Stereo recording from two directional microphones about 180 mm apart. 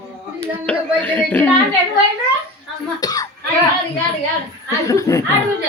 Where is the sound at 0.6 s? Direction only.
10° left (ahead or behind).